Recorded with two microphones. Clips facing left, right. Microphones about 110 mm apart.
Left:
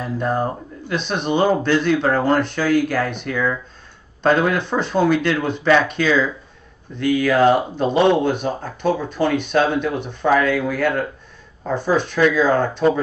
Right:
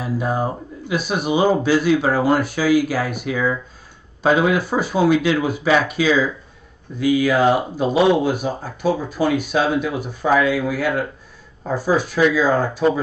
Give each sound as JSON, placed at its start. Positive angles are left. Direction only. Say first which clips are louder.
{"t": 0.0, "sound": "speech", "louder": "even", "side_deg": -5}